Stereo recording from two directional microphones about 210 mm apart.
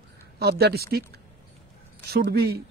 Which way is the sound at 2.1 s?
50° right (ahead or behind).